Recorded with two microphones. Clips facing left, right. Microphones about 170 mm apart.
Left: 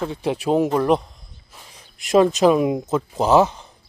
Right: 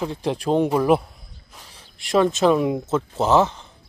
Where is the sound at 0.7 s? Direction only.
5° right (ahead or behind).